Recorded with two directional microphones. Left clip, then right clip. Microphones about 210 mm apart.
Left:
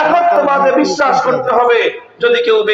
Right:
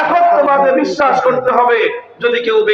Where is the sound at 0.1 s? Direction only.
30° right (ahead or behind).